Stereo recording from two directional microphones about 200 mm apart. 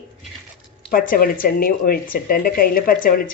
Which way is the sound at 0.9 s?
45° left (ahead or behind).